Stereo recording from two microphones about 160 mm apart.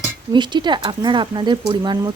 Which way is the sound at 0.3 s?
30° right (ahead or behind).